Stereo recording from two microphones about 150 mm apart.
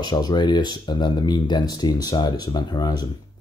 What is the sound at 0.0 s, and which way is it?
Speech, 30° left (ahead or behind).